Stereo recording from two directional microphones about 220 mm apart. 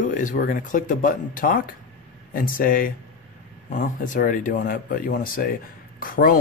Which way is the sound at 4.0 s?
35° left (ahead or behind).